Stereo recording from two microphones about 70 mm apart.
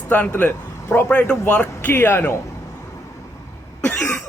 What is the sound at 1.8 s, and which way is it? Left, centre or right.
Speech, left.